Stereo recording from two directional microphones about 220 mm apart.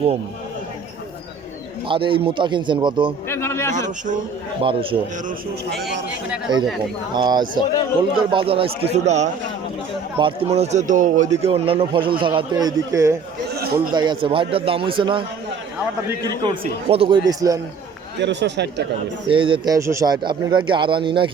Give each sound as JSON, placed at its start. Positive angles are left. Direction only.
{"t": 1.9, "sound": "a man's voice", "side_deg": -25}
{"t": 3.2, "sound": "a sound", "side_deg": 10}
{"t": 3.8, "sound": "a man's voice", "side_deg": -35}
{"t": 4.6, "sound": "a man's voice", "side_deg": -25}
{"t": 6.5, "sound": "a man's voice", "side_deg": -20}
{"t": 18.2, "sound": "a man's voice", "side_deg": -50}
{"t": 19.3, "sound": "a man's voice", "side_deg": -25}